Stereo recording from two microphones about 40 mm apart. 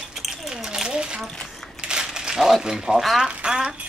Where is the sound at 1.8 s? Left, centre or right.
Centre.